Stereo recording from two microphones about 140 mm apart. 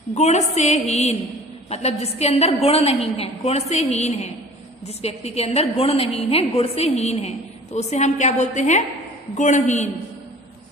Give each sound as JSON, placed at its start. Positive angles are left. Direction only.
{"t": 0.1, "sound": "a woman's voice", "side_deg": 55}